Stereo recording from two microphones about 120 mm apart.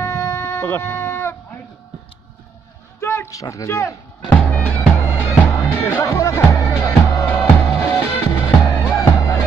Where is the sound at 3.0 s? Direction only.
20° left (ahead or behind).